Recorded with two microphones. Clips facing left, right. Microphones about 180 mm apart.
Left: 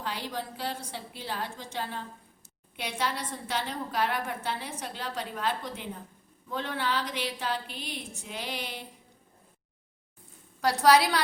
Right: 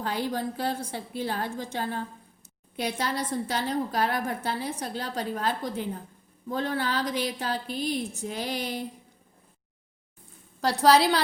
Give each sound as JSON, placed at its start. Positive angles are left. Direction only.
{"t": 0.0, "sound": "a woman's voice", "side_deg": -45}
{"t": 10.6, "sound": "a woman's voice", "side_deg": -30}